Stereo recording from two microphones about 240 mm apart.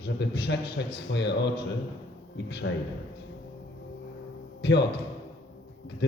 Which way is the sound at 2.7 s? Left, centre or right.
Left.